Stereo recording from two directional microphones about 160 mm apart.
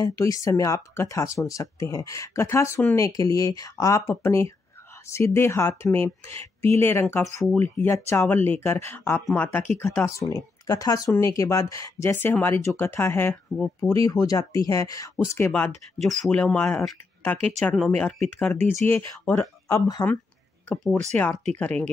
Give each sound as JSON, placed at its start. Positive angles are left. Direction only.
{"t": 0.0, "sound": "speech", "side_deg": 20}
{"t": 16.0, "sound": "speech", "side_deg": 0}
{"t": 18.9, "sound": "speech", "side_deg": 15}
{"t": 20.6, "sound": "speech", "side_deg": 5}